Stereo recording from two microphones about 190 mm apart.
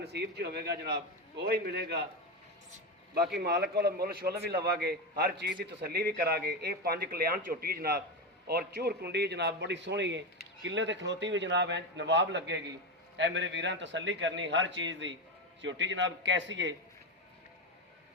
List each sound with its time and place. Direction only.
0.0 s a man's voice: 60° right (ahead or behind)
3.4 s a man's voice: 55° right (ahead or behind); by 16.7 s 75° right (ahead or behind)